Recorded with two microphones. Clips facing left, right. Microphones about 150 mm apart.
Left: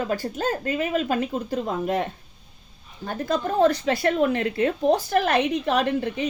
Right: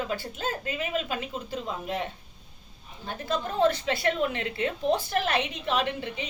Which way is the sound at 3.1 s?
45° left (ahead or behind).